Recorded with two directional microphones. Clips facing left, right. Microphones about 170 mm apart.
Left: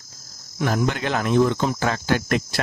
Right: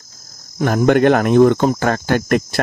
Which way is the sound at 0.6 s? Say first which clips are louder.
Right 10 dB; 50° right (ahead or behind).